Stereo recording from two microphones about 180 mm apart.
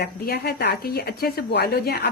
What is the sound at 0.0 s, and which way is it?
A woman's voice, 60° left (ahead or behind).